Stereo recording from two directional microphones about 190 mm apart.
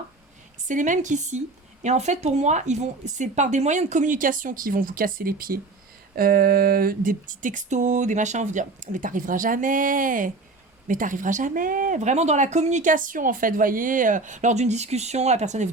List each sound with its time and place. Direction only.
0.7 s speech: 40° right (ahead or behind)
6.1 s a sound: 50° right (ahead or behind)
10.8 s speech: 45° right (ahead or behind)